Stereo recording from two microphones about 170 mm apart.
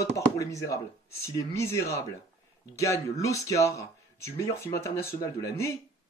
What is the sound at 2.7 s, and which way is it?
Speech, 20° left (ahead or behind).